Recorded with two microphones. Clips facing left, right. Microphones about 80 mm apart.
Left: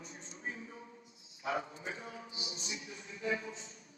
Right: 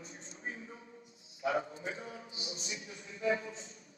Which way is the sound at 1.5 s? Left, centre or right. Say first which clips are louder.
Right 2 dB; right.